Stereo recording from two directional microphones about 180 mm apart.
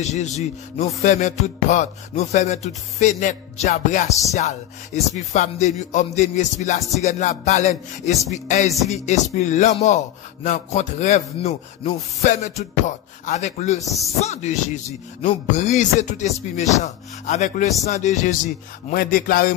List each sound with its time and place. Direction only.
0.0 s speech: 40° left (ahead or behind)
1.0 s music: 40° left (ahead or behind)
4.3 s speech: 40° left (ahead or behind)
16.8 s music: 40° left (ahead or behind)